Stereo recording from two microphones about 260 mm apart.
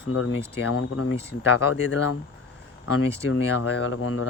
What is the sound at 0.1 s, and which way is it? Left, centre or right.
Speech, left.